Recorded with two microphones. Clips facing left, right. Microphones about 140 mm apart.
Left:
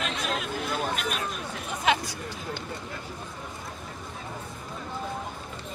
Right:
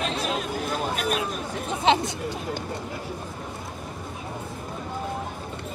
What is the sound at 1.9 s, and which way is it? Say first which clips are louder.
Speech: right 4 dB; 25° right (ahead or behind).